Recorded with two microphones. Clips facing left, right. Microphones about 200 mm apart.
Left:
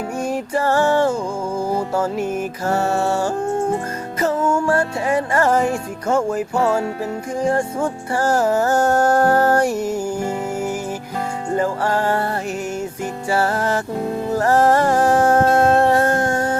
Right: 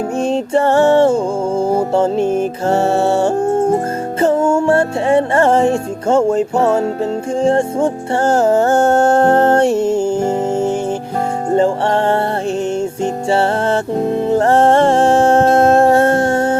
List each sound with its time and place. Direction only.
0.2 s music: 25° right (ahead or behind)
13.3 s music: 25° right (ahead or behind)